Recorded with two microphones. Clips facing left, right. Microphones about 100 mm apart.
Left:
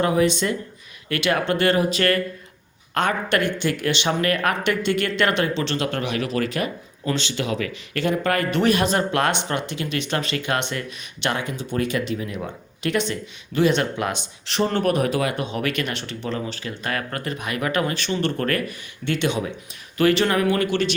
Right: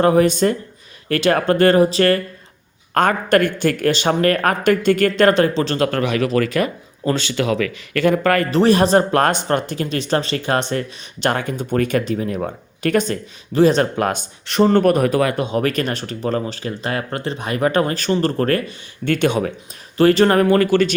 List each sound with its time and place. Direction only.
0.0 s speech: 45° right (ahead or behind)
2.9 s speech: 45° right (ahead or behind)
5.9 s speech: 70° right (ahead or behind)
6.5 s speech: 50° right (ahead or behind)
7.3 s speech: 80° right
8.0 s speech: 50° right (ahead or behind)
8.4 s speech: 35° right (ahead or behind)
19.0 s speech: 45° right (ahead or behind)
20.0 s speech: 35° right (ahead or behind)